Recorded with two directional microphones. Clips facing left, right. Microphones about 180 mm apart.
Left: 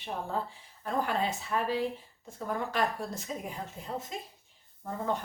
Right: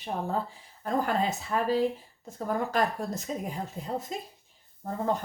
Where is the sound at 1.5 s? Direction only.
40° right (ahead or behind).